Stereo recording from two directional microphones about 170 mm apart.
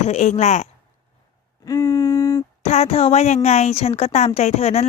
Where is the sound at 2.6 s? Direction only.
40° left (ahead or behind).